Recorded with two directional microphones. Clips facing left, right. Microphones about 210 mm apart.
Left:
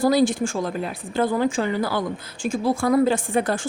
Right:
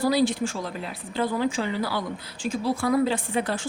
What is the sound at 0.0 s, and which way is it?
A woman's voice, 45° left (ahead or behind).